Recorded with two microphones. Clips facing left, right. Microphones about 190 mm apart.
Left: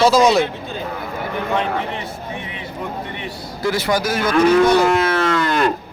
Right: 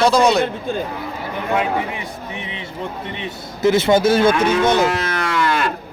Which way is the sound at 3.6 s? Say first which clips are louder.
Right 6 dB; 25° right (ahead or behind).